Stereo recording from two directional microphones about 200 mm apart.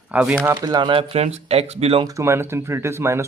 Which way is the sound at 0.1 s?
5° right (ahead or behind).